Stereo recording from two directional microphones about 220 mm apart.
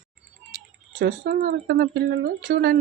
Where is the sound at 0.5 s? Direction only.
40° right (ahead or behind).